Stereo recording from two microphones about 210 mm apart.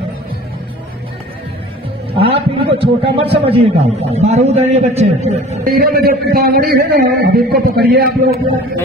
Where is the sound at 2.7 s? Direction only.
25° right (ahead or behind).